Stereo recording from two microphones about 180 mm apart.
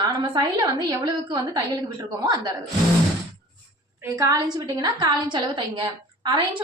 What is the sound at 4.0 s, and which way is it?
A woman's voice, 15° right (ahead or behind).